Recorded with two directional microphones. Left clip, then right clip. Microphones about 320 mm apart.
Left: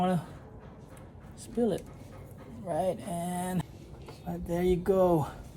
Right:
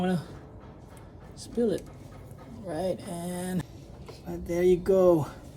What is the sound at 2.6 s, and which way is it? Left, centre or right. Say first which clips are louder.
Speech: left 1 dB; centre.